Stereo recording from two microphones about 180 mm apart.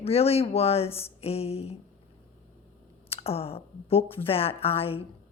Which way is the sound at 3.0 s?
35° left (ahead or behind).